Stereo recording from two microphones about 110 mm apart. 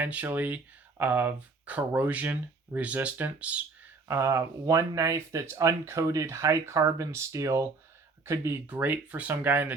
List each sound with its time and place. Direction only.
0.0 s speech: 15° right (ahead or behind)
4.1 s speech: 25° right (ahead or behind)